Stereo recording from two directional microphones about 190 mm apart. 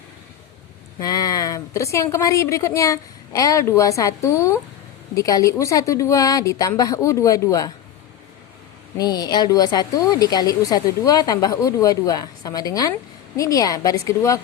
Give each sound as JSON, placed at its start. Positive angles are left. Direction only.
{"t": 0.9, "sound": "a woman's voice", "side_deg": 20}
{"t": 9.0, "sound": "speech", "side_deg": 20}